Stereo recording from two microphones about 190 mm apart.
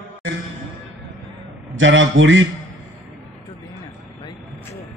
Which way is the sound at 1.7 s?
80° right.